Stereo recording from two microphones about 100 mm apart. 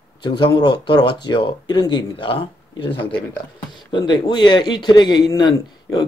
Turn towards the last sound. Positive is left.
turn(degrees=45)  # may be behind; listen again after turning